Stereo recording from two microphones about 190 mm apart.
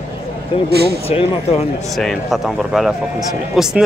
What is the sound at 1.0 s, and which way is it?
Speech, 30° left (ahead or behind).